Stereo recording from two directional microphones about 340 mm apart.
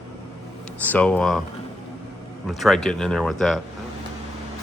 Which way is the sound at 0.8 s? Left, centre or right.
Centre.